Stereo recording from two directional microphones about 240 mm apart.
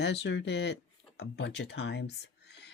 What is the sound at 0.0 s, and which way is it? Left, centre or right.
Speech, left.